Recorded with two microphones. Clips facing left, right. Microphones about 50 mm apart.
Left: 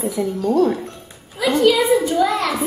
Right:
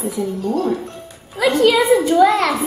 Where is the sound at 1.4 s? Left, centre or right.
Right.